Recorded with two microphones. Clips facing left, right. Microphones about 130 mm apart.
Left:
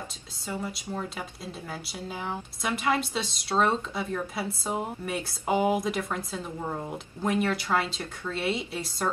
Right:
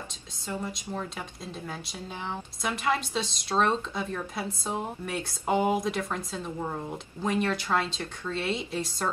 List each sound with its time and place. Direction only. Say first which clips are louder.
0.5 s speech: even; 5° left (ahead or behind)